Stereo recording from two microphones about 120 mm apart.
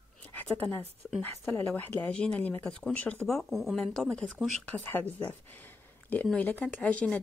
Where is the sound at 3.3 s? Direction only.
Centre (ahead or behind).